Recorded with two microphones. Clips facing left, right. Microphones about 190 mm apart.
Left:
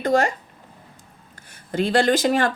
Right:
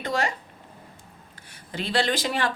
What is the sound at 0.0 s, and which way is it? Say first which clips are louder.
Speech: left 7 dB; 45° left (ahead or behind).